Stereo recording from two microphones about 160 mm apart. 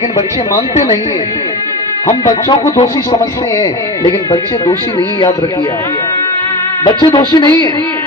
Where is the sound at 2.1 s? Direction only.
30° left (ahead or behind).